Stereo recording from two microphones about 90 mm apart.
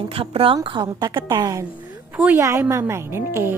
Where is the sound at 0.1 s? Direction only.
90° right.